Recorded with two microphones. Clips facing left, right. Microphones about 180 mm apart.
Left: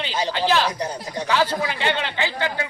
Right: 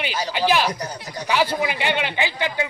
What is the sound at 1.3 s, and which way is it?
A man's voice, 15° right (ahead or behind).